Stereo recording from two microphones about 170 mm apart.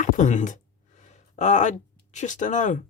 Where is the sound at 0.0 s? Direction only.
45° left (ahead or behind).